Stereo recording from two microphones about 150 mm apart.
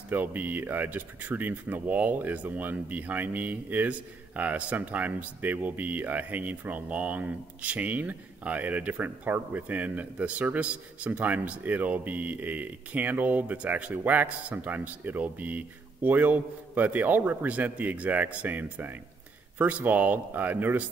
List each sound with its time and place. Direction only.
0.1 s speech: 10° right (ahead or behind)